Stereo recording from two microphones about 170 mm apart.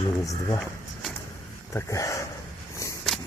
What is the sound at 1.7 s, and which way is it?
Speech, 20° left (ahead or behind).